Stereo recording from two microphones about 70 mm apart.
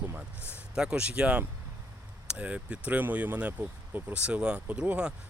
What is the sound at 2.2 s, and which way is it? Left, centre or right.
Speech, centre.